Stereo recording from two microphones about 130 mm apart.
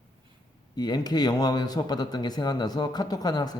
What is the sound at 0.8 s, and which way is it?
Speech, 30° left (ahead or behind).